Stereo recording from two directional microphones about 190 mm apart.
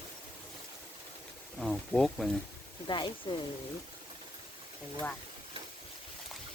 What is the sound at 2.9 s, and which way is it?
Speech, 25° left (ahead or behind).